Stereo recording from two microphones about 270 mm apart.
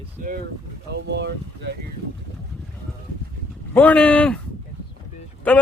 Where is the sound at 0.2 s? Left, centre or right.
Right.